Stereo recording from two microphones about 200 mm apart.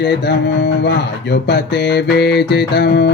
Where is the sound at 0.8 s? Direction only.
55° left (ahead or behind).